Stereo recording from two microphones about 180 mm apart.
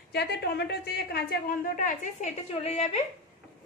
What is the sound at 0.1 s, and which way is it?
A woman's voice, 65° left (ahead or behind).